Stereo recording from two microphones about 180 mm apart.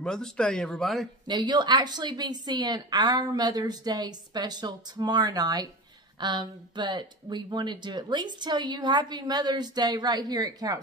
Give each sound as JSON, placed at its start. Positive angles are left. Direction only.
{"t": 0.0, "sound": "speech", "side_deg": 5}
{"t": 1.2, "sound": "speech", "side_deg": -25}